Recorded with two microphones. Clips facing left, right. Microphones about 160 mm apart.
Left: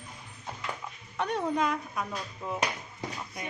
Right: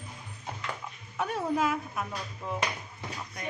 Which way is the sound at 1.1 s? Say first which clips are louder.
Even; 5° right (ahead or behind).